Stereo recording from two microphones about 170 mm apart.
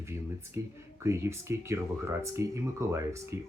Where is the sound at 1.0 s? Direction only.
15° right (ahead or behind).